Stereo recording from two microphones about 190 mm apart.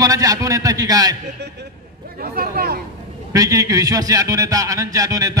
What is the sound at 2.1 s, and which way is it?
Speech, 55° right (ahead or behind).